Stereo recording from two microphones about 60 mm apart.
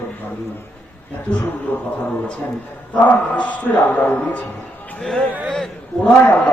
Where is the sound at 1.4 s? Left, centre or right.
Left.